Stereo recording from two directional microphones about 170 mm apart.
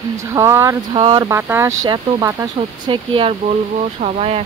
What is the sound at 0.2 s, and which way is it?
Speech, 20° right (ahead or behind).